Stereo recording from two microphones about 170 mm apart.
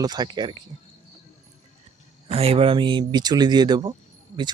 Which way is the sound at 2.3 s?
35° right (ahead or behind).